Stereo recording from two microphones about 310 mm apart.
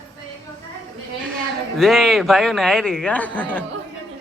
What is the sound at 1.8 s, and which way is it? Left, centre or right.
Speech, centre.